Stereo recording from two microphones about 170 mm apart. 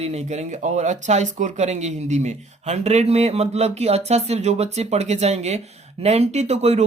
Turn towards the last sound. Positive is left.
turn(degrees=-40)  # may be behind; listen again after turning